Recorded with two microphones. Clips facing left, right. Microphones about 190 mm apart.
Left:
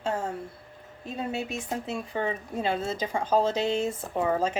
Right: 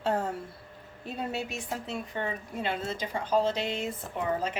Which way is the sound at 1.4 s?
25° left (ahead or behind).